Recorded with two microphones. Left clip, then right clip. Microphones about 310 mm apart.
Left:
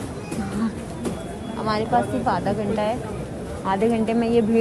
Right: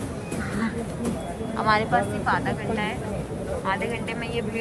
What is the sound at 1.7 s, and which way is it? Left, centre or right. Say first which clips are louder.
A woman's voice: even; centre.